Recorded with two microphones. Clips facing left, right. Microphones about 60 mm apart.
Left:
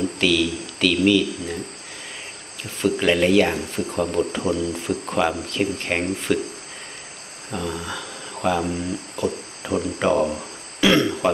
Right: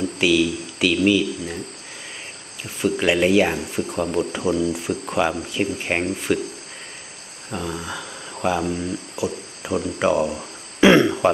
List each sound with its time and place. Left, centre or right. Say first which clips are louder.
0.2 s speech: right 3 dB; centre
2.8 s speech: even; centre
7.5 s speech: even; centre
10.8 s speech: right 4 dB; right